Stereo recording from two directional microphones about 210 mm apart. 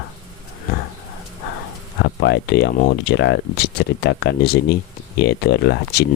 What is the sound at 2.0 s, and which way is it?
Speech, 55° left (ahead or behind).